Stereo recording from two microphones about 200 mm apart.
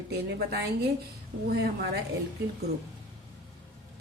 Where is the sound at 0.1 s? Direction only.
55° right (ahead or behind).